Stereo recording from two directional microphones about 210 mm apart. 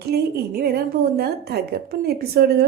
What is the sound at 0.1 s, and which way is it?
A woman's voice, 50° right (ahead or behind).